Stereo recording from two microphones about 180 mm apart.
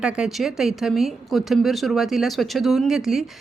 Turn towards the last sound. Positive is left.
turn(degrees=0)  # may be behind; listen again after turning